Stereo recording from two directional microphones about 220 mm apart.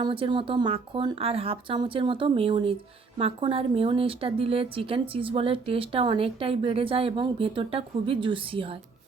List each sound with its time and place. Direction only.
0.0 s a woman's voice: 20° right (ahead or behind)